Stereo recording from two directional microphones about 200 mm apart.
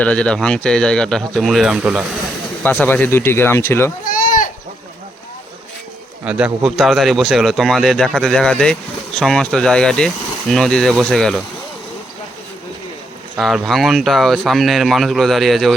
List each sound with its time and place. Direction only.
0.0 s a man's voice: 5° left (ahead or behind)
2.6 s speech: 10° left (ahead or behind)
4.1 s sheep: 45° left (ahead or behind)
6.2 s a man's voice: 5° right (ahead or behind)
13.3 s a man's voice: centre (ahead or behind)